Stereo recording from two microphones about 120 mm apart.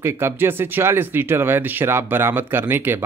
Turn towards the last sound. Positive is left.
turn(degrees=-20)  # may be behind; listen again after turning